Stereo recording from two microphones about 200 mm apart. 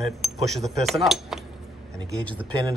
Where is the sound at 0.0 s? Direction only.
Centre (ahead or behind).